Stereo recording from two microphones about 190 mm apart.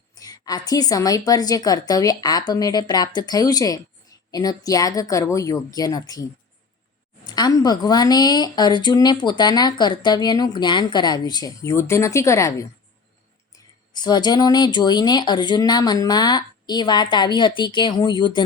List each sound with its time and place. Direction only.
0.2 s a woman's voice: 20° left (ahead or behind)
7.3 s a woman's voice: 20° left (ahead or behind)
13.9 s a woman's voice: 20° left (ahead or behind)